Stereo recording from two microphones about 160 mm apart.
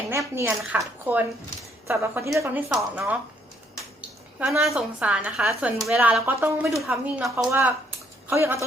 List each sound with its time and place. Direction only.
0.1 s a woman's voice: 15° right (ahead or behind)
4.4 s a woman's voice: 5° right (ahead or behind)
5.5 s a woman's voice: 20° right (ahead or behind)
5.8 s a woman's voice: 5° right (ahead or behind)